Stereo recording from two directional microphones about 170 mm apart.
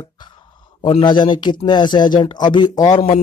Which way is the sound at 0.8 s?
30° left (ahead or behind).